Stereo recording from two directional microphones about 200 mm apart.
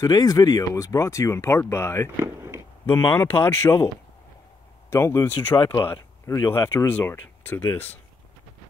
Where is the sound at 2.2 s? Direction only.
15° right (ahead or behind).